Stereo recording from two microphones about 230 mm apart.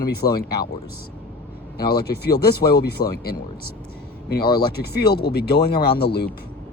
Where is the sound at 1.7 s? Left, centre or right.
Left.